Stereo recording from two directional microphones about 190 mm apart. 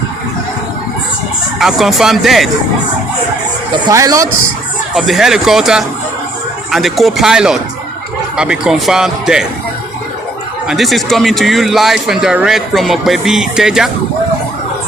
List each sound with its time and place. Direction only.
1.5 s a man's voice: centre (ahead or behind)
3.8 s speech: 20° right (ahead or behind)
4.9 s a man's voice: centre (ahead or behind)
10.7 s a man's voice: centre (ahead or behind)